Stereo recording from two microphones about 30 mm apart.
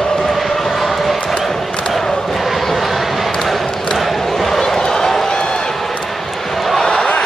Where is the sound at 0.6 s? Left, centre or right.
Centre.